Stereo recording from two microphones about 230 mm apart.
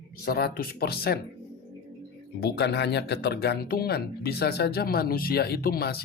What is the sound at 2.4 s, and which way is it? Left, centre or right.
Speech, left.